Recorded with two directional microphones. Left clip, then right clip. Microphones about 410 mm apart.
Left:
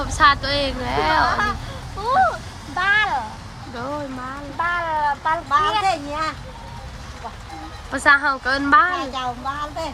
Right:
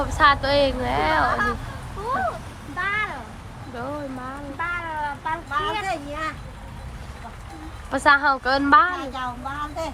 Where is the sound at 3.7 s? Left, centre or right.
Centre.